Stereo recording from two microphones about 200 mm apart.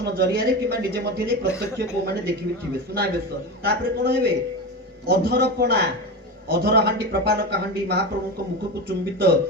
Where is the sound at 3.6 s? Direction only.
50° right (ahead or behind).